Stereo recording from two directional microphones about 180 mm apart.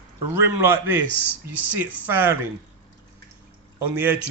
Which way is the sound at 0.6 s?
15° right (ahead or behind).